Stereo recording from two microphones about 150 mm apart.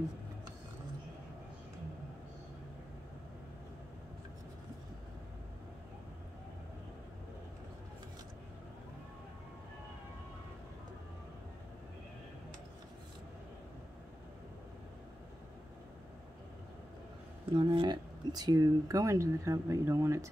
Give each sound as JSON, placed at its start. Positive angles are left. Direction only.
{"t": 17.6, "sound": "speech", "side_deg": -30}